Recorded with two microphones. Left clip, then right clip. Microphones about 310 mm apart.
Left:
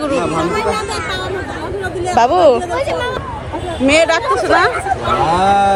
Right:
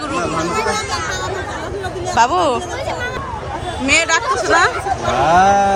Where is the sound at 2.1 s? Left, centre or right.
Centre.